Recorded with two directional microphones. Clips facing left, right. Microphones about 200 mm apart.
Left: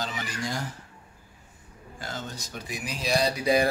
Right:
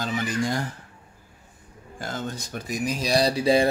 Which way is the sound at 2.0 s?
50° right (ahead or behind).